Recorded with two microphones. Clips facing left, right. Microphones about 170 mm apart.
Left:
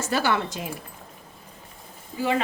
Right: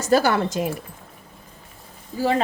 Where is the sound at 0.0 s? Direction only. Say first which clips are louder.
Right 6 dB; 40° right (ahead or behind).